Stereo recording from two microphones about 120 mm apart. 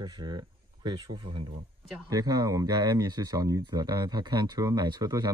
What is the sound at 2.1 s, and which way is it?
Speech, 30° right (ahead or behind).